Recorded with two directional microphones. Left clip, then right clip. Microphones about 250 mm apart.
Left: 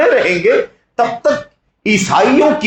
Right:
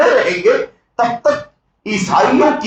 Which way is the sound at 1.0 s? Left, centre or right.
Left.